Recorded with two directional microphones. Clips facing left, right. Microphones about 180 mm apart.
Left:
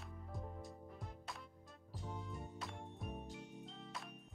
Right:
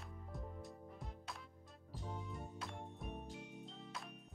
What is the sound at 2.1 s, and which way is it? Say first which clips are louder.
Music: even; centre (ahead or behind).